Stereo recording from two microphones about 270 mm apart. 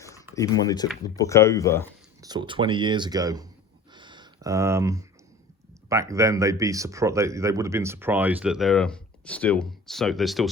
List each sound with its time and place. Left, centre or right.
0.3 s speech: centre
2.2 s speech: centre
3.9 s a sound: centre
5.9 s speech: centre